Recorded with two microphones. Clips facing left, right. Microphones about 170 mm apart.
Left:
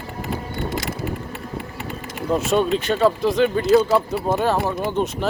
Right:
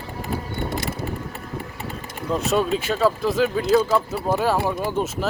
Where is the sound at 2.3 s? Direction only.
Centre (ahead or behind).